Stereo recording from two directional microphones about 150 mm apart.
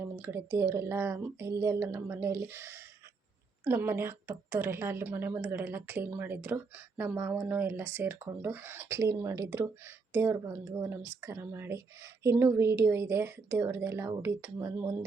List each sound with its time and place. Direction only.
0.0 s a woman's voice: 15° right (ahead or behind)